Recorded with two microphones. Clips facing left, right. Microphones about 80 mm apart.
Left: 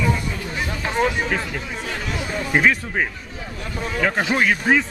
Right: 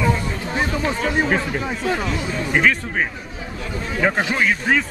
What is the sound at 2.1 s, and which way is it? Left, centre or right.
Speech, centre.